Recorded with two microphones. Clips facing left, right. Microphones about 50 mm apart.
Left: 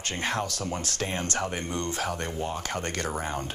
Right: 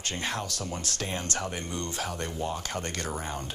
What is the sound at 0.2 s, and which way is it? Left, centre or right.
A woman's voice, left.